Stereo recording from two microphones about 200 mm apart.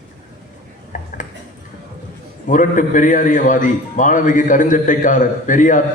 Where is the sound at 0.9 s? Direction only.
40° left (ahead or behind).